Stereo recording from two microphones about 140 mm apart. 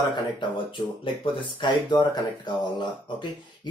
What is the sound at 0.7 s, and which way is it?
Speech, 35° left (ahead or behind).